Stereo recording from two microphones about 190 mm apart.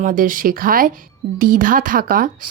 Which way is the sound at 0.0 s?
45° right (ahead or behind).